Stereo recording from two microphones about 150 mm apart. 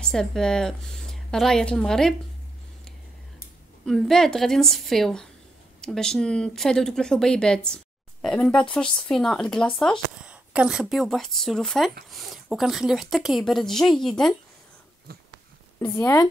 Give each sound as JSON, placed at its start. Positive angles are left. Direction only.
{"t": 0.0, "sound": "a woman's voice", "side_deg": 5}
{"t": 3.8, "sound": "speech", "side_deg": 5}
{"t": 10.2, "sound": "speech", "side_deg": -10}
{"t": 15.1, "sound": "a sound", "side_deg": -90}
{"t": 15.8, "sound": "speech", "side_deg": 25}